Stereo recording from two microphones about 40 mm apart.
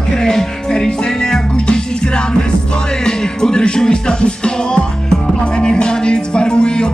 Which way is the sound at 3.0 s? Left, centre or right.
Centre.